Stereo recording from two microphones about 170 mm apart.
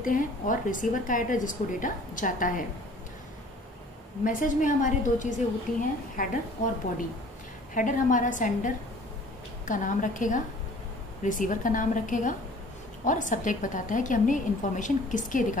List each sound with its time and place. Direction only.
0.0 s a woman's voice: 50° left (ahead or behind)
4.2 s a woman's voice: 50° left (ahead or behind)
7.7 s a woman's voice: 50° left (ahead or behind)